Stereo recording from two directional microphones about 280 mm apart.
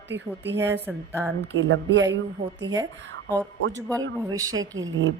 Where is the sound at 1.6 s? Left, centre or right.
Right.